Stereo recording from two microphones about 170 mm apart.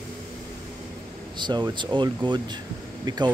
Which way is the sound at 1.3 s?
25° right (ahead or behind).